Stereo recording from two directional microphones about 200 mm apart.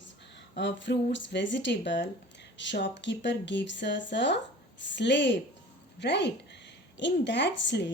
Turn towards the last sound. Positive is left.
turn(degrees=60)  # may be behind; listen again after turning